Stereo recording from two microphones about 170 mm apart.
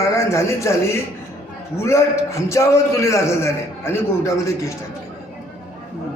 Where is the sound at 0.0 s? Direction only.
15° left (ahead or behind).